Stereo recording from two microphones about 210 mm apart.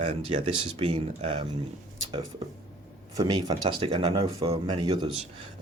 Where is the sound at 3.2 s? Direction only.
20° right (ahead or behind).